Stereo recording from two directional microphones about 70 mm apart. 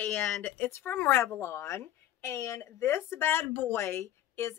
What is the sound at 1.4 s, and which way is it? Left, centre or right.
Speech, left.